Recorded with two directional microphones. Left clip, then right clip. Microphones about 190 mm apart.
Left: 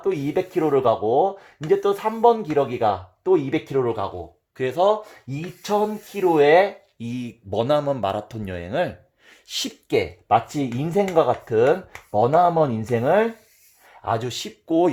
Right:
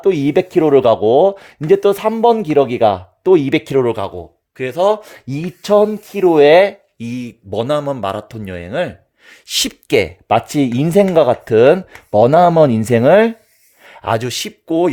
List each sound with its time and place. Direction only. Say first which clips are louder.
0.0 s speech: right 9 dB; 70° right (ahead or behind); by 4.1 s 55° right (ahead or behind)
4.5 s speech: right 4 dB; 30° right (ahead or behind)
4.9 s speech: right 5 dB; 60° right (ahead or behind)
5.6 s speech: right 10 dB; 70° right (ahead or behind)
7.0 s speech: right 6 dB; 30° right (ahead or behind); by 13.3 s 75° right (ahead or behind)
13.8 s speech: right 7 dB; 60° right (ahead or behind); by 14.5 s 45° right (ahead or behind)